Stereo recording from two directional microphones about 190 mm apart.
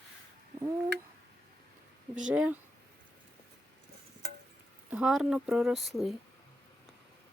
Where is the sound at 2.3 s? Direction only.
5° right (ahead or behind).